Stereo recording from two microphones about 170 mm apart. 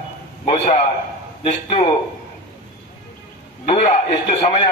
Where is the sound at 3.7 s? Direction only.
40° left (ahead or behind).